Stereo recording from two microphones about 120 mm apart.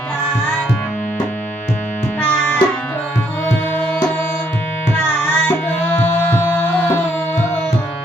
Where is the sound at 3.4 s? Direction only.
15° left (ahead or behind).